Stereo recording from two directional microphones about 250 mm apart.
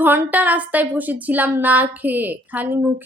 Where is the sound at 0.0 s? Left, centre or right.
Centre.